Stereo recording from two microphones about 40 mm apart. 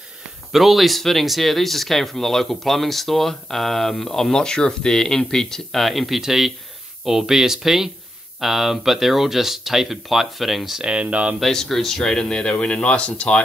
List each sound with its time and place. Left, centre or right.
0.5 s speech: centre
10.8 s speech: right
11.5 s speech: centre
12.0 s speech: centre